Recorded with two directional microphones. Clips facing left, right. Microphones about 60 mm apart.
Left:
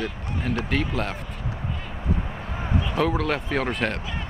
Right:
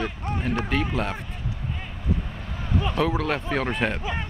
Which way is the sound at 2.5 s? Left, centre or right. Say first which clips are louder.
Left 1 dB; left.